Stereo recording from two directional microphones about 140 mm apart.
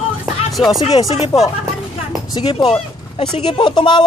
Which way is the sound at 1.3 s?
25° left (ahead or behind).